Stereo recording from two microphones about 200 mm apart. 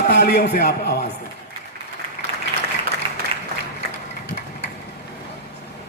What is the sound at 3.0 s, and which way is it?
Applause, 25° right (ahead or behind).